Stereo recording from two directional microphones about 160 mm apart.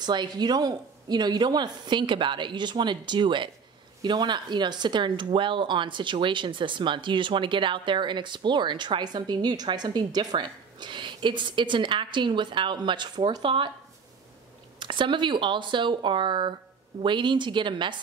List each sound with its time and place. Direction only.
0.0 s speech: 25° right (ahead or behind)
14.8 s speech: 30° right (ahead or behind)